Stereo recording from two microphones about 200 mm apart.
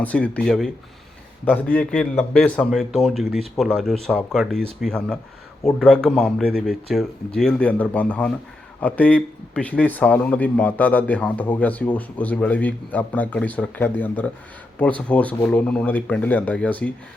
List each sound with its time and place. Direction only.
0.0 s a man's voice: 5° left (ahead or behind)